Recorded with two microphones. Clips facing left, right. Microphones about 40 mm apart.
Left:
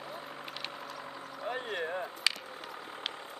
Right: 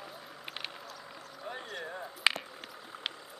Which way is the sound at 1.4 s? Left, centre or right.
Left.